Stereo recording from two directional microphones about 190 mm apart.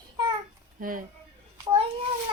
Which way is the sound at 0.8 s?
45° right (ahead or behind).